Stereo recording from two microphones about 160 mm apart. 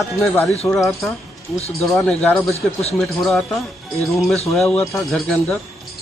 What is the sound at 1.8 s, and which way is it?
Speech, centre (ahead or behind).